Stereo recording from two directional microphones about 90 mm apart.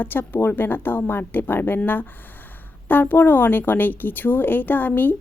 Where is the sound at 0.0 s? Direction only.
20° left (ahead or behind).